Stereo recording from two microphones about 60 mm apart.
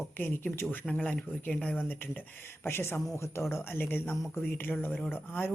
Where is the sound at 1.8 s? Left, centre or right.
Left.